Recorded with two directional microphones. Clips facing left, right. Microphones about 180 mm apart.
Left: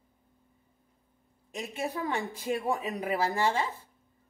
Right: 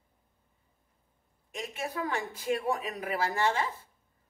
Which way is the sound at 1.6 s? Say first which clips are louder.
Left 2 dB; 30° left (ahead or behind).